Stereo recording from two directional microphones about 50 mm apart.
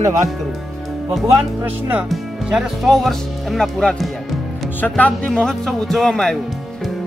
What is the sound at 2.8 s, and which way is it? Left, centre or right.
Speech, centre.